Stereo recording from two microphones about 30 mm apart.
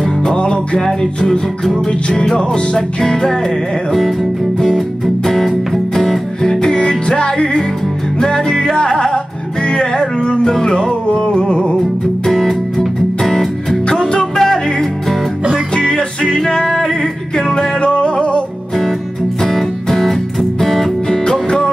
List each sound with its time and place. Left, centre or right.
0.0 s music: centre
0.4 s music: left
0.8 s music: centre
4.6 s music: centre; by 10.4 s left
10.4 s music: centre
11.1 s music: left
12.3 s music: centre
13.8 s music: left
14.4 s music: centre
15.7 s music: left
17.7 s music: left
19.4 s music: centre